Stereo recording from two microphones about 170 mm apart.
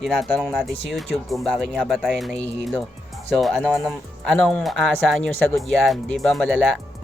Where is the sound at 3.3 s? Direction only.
Centre (ahead or behind).